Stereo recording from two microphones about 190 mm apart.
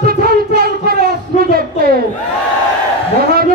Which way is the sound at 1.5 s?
55° right (ahead or behind).